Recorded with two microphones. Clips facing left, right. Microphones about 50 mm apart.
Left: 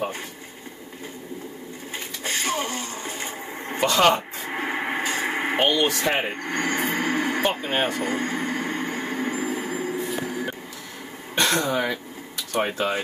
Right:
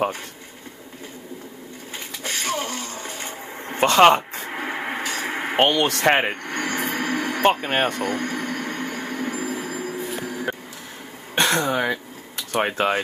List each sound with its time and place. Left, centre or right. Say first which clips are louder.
2.2 s a sound: even; centre
3.8 s speech: right 5 dB; right
4.5 s radio: left 2 dB; centre
5.0 s radio: left 1 dB; centre
5.6 s speech: right 4 dB; right
6.4 s speech: left 1 dB; centre
7.0 s a sound: right 1 dB; centre
9.9 s vehicle: left 1 dB; centre
11.3 s speech: right 2 dB; right
12.5 s speech: right 3 dB; right